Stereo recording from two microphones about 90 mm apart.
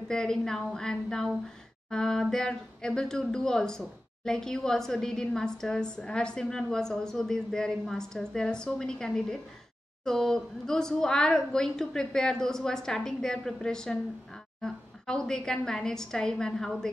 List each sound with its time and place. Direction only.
0.1 s a woman's voice: 5° left (ahead or behind)